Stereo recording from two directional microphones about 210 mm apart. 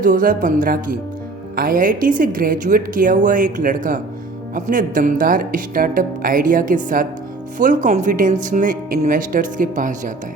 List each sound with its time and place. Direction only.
0.0 s speech: 40° right (ahead or behind)